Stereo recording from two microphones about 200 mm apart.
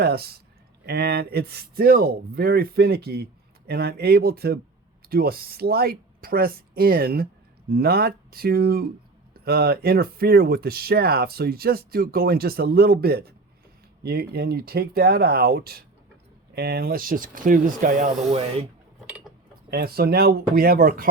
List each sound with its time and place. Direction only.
0.0 s a sound: 50° right (ahead or behind)
0.9 s speech: 55° right (ahead or behind); by 18.7 s 30° right (ahead or behind)
19.7 s speech: 50° right (ahead or behind)